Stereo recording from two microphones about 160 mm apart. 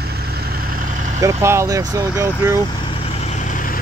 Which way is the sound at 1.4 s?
20° right (ahead or behind).